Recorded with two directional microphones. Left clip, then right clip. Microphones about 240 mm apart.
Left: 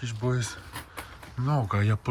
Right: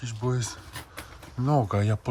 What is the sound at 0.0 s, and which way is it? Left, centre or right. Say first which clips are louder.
Speech: even; right.